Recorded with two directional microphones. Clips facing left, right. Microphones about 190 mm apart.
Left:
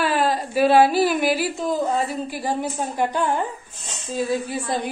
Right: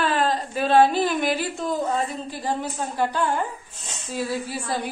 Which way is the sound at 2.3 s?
10° left (ahead or behind).